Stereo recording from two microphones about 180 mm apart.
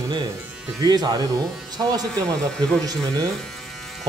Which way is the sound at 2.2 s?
5° left (ahead or behind).